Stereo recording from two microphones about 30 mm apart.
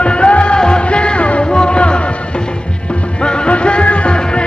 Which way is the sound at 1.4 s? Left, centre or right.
Left.